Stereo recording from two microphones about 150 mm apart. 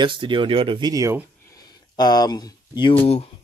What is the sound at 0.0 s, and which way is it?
Speech, 35° right (ahead or behind).